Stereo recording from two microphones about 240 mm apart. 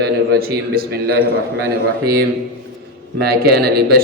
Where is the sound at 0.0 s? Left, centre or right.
Right.